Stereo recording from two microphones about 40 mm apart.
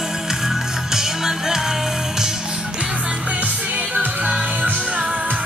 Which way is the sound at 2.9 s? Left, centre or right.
Right.